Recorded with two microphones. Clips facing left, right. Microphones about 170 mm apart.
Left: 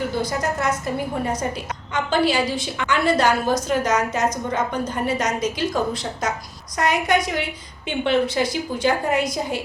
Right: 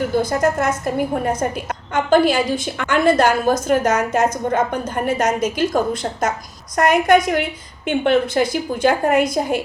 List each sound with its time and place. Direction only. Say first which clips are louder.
0.2 s a woman's voice: right 8 dB; 50° right (ahead or behind)